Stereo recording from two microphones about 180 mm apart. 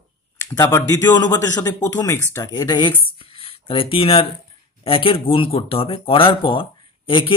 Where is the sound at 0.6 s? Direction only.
15° left (ahead or behind).